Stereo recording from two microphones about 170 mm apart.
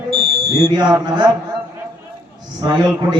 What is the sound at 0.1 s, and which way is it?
Fire alarm, 25° right (ahead or behind).